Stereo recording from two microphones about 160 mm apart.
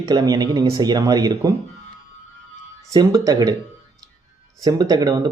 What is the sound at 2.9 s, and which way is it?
Speech, 20° right (ahead or behind).